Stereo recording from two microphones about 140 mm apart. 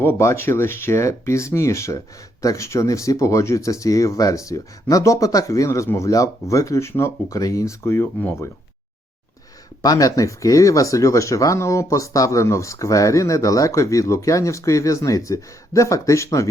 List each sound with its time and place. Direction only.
0.0 s speech: 20° left (ahead or behind)
9.8 s speech: 25° left (ahead or behind)